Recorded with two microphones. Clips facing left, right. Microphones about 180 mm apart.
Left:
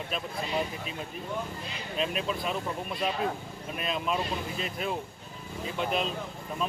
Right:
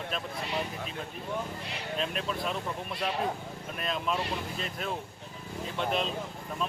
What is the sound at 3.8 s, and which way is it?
Speech, 5° left (ahead or behind).